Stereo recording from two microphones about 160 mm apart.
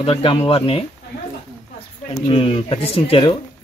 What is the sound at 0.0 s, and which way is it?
Speech, 35° left (ahead or behind).